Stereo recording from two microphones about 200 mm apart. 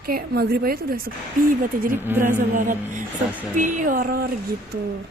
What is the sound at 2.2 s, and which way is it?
A woman's voice, 40° right (ahead or behind).